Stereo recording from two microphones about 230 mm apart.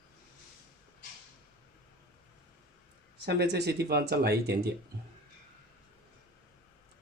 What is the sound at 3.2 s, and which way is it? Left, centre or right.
Speech, right.